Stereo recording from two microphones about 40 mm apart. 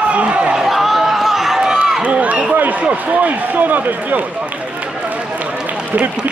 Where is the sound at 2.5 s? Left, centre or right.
Right.